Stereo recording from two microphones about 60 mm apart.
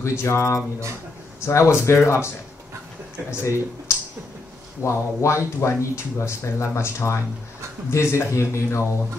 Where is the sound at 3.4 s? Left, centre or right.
Left.